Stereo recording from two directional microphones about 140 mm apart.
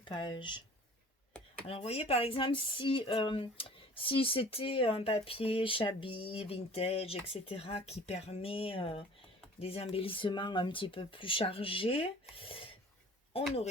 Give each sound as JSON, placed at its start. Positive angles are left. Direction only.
{"t": 0.0, "sound": "speech", "side_deg": 35}
{"t": 1.6, "sound": "speech", "side_deg": 45}